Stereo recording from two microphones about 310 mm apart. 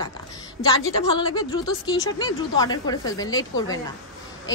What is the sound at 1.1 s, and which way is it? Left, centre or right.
A woman's voice, centre.